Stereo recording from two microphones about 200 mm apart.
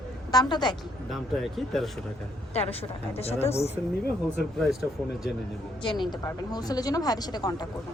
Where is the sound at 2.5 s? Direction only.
30° left (ahead or behind).